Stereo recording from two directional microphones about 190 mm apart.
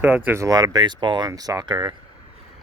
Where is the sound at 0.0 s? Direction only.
10° right (ahead or behind).